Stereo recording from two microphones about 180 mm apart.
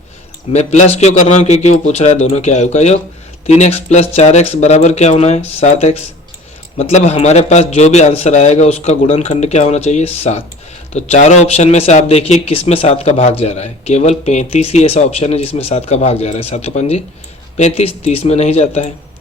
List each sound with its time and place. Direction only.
0.5 s speech: 40° left (ahead or behind)